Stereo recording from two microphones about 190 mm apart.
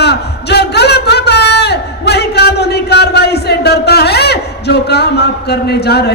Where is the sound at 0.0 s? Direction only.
60° left (ahead or behind).